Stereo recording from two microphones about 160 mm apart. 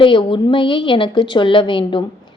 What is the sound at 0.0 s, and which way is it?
Speech, 30° left (ahead or behind).